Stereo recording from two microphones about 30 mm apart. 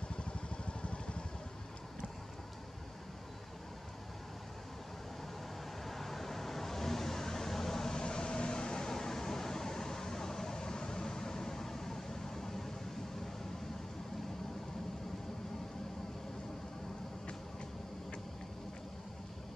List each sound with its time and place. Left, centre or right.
0.1 s vehicle: left
5.9 s vehicle: centre
8.0 s a sound: left; by 12.7 s centre